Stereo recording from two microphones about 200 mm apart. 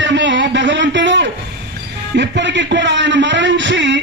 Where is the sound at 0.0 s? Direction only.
65° right (ahead or behind).